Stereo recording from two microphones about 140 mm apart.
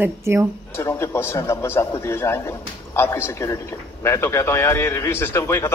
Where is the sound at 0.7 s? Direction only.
20° left (ahead or behind).